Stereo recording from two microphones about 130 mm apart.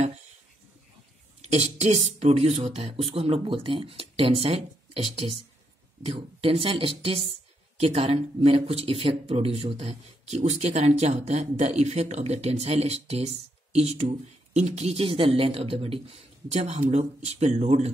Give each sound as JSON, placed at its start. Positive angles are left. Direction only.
{"t": 1.4, "sound": "a woman's voice", "side_deg": -60}